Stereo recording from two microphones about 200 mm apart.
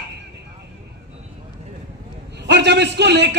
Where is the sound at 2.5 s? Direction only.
60° right (ahead or behind).